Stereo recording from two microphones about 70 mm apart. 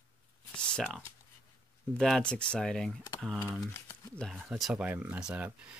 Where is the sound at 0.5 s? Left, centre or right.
Centre.